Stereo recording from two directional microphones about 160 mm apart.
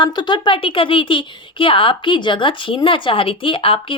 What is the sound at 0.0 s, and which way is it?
Speech, 30° left (ahead or behind).